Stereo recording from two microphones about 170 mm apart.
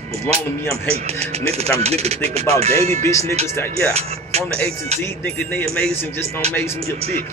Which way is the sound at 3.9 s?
40° right (ahead or behind).